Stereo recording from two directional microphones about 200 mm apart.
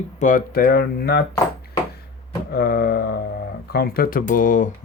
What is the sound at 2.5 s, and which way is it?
Speech, 50° left (ahead or behind).